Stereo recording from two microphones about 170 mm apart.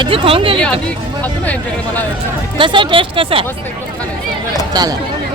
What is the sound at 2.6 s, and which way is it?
Speech, 30° right (ahead or behind).